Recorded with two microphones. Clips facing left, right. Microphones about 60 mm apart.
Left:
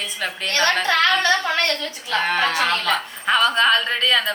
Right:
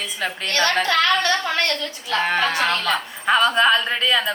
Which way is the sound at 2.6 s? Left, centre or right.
Centre.